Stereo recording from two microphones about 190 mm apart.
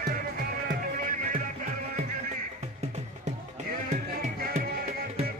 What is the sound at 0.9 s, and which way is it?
Music, 45° right (ahead or behind).